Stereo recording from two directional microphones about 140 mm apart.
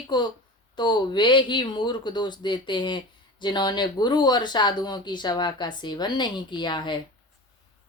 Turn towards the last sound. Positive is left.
turn(degrees=30)  # may be behind; listen again after turning